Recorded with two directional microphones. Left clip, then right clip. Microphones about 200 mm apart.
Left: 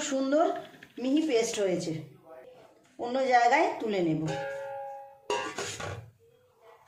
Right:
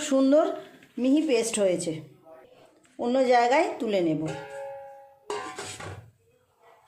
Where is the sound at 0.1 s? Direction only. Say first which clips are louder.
Right 5 dB; 45° right (ahead or behind).